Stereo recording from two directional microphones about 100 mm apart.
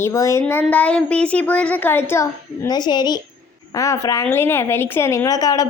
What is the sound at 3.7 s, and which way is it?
Speech, 35° left (ahead or behind).